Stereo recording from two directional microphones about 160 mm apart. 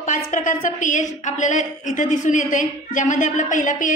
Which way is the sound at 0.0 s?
55° left (ahead or behind).